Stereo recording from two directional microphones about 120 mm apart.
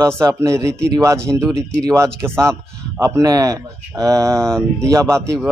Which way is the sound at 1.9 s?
25° right (ahead or behind).